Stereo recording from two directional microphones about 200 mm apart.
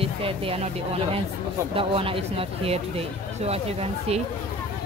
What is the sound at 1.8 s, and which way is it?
Speech, 25° right (ahead or behind).